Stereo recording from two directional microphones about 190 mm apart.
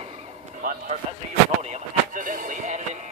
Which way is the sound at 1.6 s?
40° right (ahead or behind).